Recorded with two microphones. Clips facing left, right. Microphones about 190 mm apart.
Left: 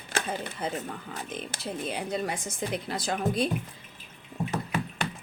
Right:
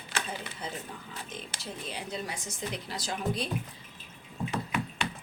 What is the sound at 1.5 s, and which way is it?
A woman's voice, 55° left (ahead or behind).